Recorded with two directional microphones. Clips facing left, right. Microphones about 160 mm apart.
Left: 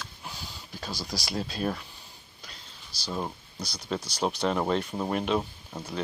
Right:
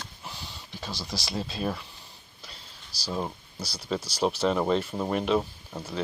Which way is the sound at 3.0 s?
5° right (ahead or behind).